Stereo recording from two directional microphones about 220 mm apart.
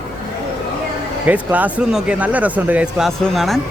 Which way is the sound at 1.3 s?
5° right (ahead or behind).